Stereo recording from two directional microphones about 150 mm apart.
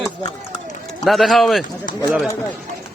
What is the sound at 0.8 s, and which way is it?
Speech, centre (ahead or behind).